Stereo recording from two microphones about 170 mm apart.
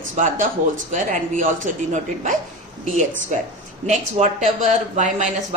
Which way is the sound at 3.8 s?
45° right (ahead or behind).